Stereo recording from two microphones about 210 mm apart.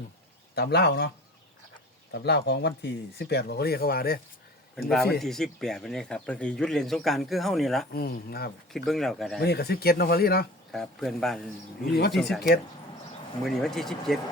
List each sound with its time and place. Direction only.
0.5 s speech: 50° left (ahead or behind)
2.1 s speech: 55° left (ahead or behind)
4.8 s speech: centre (ahead or behind)
7.9 s speech: 45° left (ahead or behind)
8.7 s speech: centre (ahead or behind)
9.4 s speech: 50° left (ahead or behind)
10.7 s speech: centre (ahead or behind)
13.4 s speech: centre (ahead or behind)